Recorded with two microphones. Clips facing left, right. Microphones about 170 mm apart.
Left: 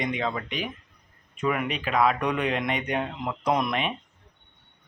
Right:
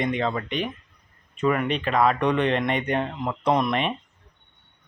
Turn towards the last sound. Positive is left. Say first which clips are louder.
# right 3 dB
turn(degrees=5)  # may be behind; listen again after turning